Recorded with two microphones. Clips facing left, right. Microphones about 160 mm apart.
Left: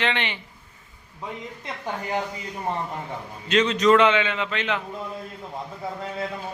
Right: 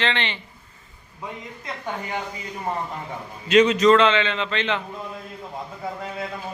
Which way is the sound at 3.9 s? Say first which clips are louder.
Right 1 dB; 15° left (ahead or behind).